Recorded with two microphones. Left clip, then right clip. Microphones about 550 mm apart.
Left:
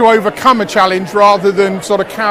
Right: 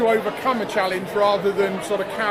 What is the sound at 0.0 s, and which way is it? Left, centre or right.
Speech, left.